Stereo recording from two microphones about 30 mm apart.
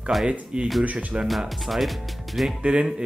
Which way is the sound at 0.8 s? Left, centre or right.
Right.